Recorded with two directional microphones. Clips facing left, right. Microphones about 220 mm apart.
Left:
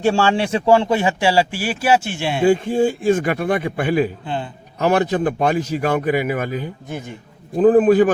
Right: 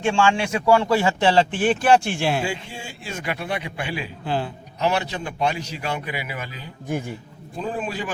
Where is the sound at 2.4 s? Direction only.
50° left (ahead or behind).